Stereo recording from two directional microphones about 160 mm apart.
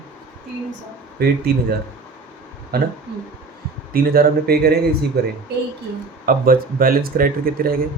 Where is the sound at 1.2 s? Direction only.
75° right (ahead or behind).